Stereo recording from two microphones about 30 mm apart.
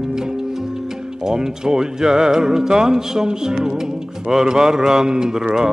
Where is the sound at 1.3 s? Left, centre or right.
Right.